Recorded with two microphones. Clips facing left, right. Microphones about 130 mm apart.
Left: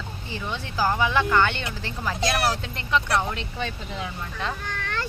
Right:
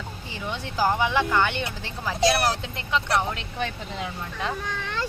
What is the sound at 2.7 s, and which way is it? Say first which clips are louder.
Speech: left 1 dB; 20° right (ahead or behind).